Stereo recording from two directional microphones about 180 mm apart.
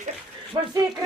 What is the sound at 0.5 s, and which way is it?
Speech, 25° right (ahead or behind).